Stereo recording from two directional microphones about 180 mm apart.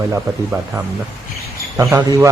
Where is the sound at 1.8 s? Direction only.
20° right (ahead or behind).